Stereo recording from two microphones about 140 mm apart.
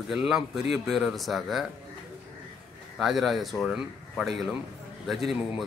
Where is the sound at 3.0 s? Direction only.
Centre (ahead or behind).